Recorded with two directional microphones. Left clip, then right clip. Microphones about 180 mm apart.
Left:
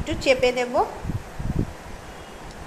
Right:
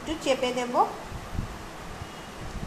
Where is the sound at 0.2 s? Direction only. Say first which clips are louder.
Left 7 dB; 30° left (ahead or behind).